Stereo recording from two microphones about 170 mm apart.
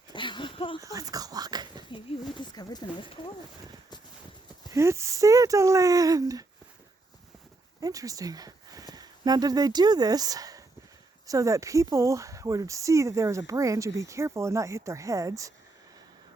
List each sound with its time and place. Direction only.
0.1 s a sound: 30° left (ahead or behind)
0.8 s speech: 20° right (ahead or behind)
2.4 s speech: 25° left (ahead or behind)
4.7 s speech: 15° right (ahead or behind)
7.8 s speech: 20° right (ahead or behind)